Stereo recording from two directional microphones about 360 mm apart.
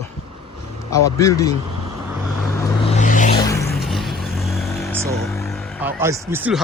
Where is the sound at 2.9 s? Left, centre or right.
Left; by 5.1 s centre.